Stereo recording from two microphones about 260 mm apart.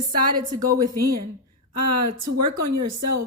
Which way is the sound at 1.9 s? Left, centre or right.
Right.